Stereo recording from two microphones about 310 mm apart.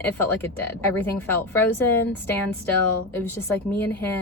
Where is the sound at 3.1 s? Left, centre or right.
Centre.